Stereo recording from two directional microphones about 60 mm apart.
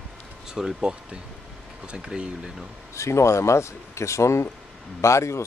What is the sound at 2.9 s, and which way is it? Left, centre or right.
Speech, left.